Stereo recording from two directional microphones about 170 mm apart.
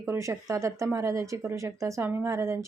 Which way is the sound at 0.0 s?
15° right (ahead or behind).